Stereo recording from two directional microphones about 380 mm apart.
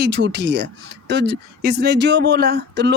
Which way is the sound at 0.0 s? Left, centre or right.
Right.